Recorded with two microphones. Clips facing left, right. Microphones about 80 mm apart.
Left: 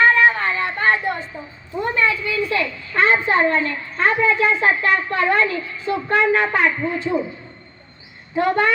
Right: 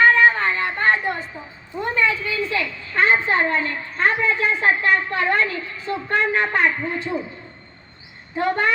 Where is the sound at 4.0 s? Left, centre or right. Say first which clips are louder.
Left 3 dB; left.